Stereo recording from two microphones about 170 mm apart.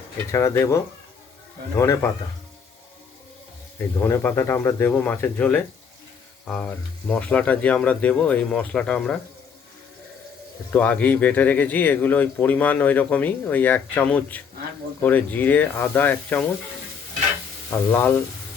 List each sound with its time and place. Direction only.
0.3 s speech: 15° left (ahead or behind)
3.8 s speech: 15° left (ahead or behind)
10.7 s speech: 10° left (ahead or behind)
17.7 s speech: 10° left (ahead or behind)